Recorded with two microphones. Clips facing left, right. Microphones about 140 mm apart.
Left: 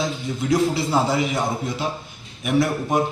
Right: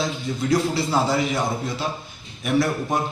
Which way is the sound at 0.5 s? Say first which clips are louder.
Left 2 dB; 15° left (ahead or behind).